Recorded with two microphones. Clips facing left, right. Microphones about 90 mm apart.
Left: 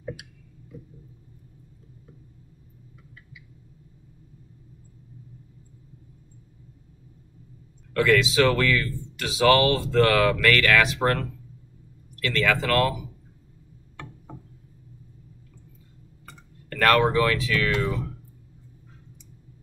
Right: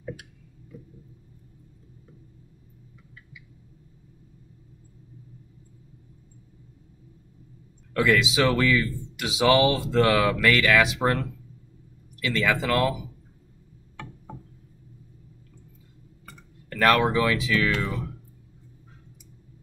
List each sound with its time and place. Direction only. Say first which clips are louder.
0.7 s a sound: left 1 dB; centre (ahead or behind)
7.9 s speech: left 1 dB; 15° right (ahead or behind)
9.2 s speech: left 1 dB; 15° right (ahead or behind)
10.1 s speech: left 1 dB; 5° right (ahead or behind)
12.2 s speech: left 1 dB; 15° right (ahead or behind)
16.6 s speech: left 1 dB; 10° right (ahead or behind)